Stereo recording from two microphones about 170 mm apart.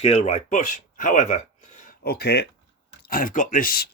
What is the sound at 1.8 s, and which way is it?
Speech, 65° left (ahead or behind).